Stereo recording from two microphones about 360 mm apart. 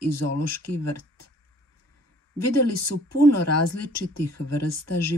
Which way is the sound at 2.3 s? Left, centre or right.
Left.